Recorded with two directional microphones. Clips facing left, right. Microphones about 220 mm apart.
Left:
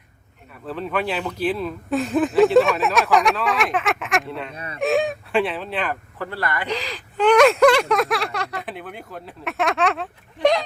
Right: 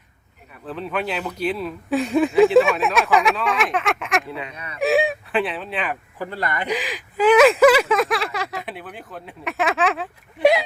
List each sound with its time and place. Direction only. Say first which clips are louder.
0.6 s speech: left 1 dB; centre (ahead or behind)
4.5 s speech: left 3 dB; 30° left (ahead or behind)
4.8 s speech: right 1 dB; centre (ahead or behind)
6.1 s speech: right 1 dB; 20° right (ahead or behind)